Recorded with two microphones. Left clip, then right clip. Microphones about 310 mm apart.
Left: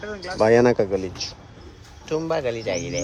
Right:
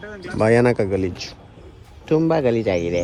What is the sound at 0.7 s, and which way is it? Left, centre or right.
Speech, right.